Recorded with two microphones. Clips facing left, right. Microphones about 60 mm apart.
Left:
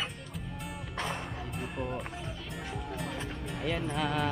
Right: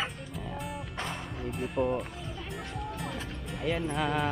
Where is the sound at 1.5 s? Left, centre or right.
Centre.